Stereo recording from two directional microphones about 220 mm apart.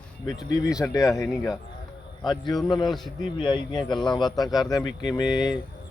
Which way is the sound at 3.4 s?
20° left (ahead or behind).